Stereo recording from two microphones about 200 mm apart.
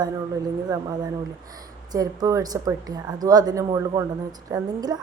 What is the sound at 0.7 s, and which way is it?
A woman's voice, 20° right (ahead or behind).